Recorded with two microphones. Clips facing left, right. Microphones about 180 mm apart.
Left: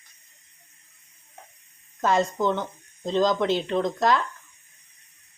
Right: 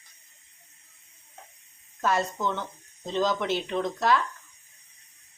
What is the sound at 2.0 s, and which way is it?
Speech, 20° left (ahead or behind).